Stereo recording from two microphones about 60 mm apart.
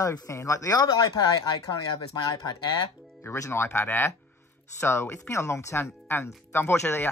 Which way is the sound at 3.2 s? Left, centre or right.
Left.